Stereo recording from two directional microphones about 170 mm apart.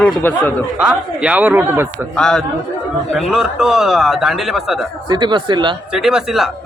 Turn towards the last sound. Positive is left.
turn(degrees=0)  # may be behind; listen again after turning